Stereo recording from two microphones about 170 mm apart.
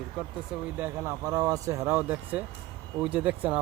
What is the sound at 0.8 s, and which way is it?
Speech, 15° right (ahead or behind).